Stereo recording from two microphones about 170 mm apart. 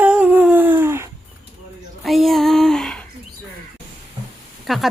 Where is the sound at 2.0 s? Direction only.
Centre (ahead or behind).